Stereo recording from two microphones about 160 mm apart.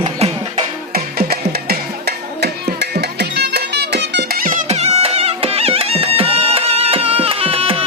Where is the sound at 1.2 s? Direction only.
70° right (ahead or behind).